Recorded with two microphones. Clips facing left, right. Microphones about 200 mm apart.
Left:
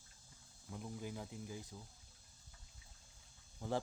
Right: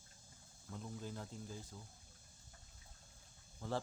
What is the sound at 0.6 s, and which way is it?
Cricket, 15° left (ahead or behind).